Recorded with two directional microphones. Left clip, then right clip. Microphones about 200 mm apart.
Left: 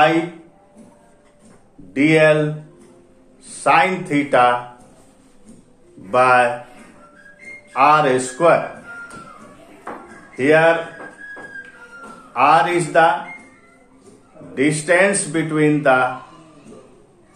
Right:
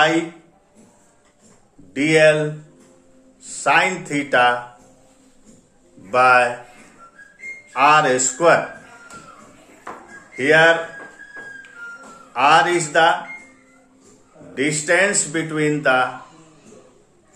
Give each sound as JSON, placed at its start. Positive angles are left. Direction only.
{"t": 2.0, "sound": "speech", "side_deg": -15}
{"t": 3.4, "sound": "speech", "side_deg": -15}
{"t": 6.0, "sound": "speech", "side_deg": -15}
{"t": 7.7, "sound": "speech", "side_deg": -15}
{"t": 10.3, "sound": "speech", "side_deg": -15}
{"t": 12.3, "sound": "speech", "side_deg": -15}
{"t": 14.5, "sound": "speech", "side_deg": -15}